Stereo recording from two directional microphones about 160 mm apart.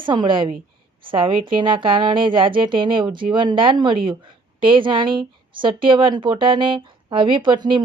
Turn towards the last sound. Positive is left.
turn(degrees=-30)  # may be behind; listen again after turning